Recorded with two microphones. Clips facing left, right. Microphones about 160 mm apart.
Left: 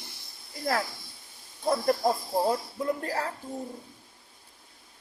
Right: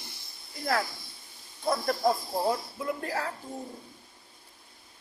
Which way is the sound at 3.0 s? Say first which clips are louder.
Left 1 dB; 40° left (ahead or behind).